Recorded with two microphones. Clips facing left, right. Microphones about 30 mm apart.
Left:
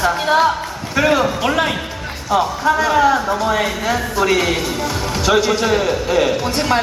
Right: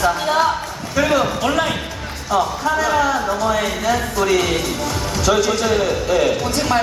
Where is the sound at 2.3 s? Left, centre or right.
Centre.